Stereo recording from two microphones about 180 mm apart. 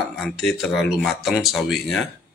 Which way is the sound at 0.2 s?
Centre (ahead or behind).